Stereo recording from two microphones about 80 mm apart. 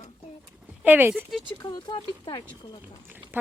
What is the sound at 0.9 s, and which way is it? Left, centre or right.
Speech, right.